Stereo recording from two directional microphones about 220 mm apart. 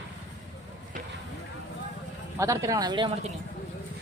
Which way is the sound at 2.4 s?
15° right (ahead or behind).